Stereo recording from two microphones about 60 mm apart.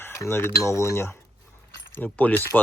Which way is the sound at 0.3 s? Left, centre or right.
Left.